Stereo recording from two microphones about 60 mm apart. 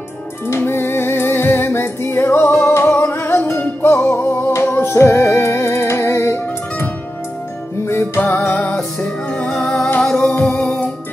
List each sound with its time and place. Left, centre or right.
0.5 s music: left
4.9 s music: left
9.0 s music: left
10.0 s music: centre